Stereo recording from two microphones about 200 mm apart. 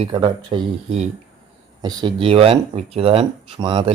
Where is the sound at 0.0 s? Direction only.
25° right (ahead or behind).